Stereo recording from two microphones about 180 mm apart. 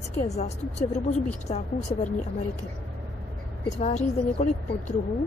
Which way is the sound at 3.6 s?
30° left (ahead or behind).